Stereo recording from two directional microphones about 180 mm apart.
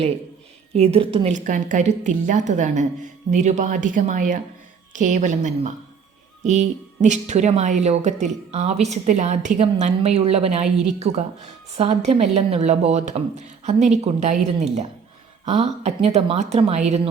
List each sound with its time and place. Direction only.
0.8 s a woman's voice: 30° right (ahead or behind)